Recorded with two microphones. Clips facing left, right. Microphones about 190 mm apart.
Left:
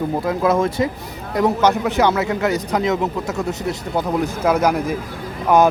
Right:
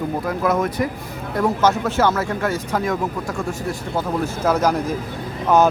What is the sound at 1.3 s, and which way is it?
A man's voice, 15° left (ahead or behind).